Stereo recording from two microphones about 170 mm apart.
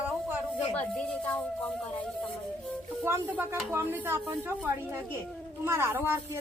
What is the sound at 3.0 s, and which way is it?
Speech, 10° right (ahead or behind).